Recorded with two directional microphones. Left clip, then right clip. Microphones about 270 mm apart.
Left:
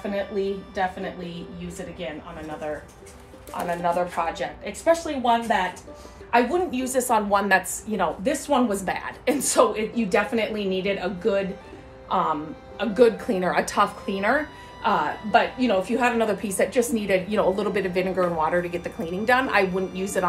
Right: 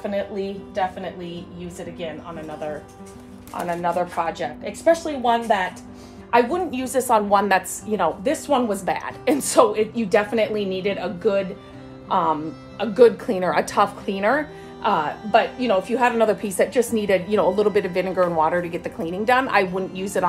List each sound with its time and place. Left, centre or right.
0.1 s a woman's voice: right
3.5 s a woman's voice: right